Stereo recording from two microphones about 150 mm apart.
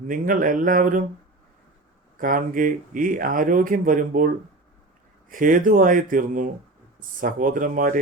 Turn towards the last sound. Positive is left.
turn(degrees=-65)  # may be behind; listen again after turning